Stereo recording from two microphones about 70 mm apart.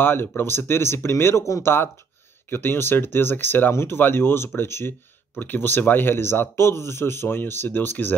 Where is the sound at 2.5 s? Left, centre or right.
Left.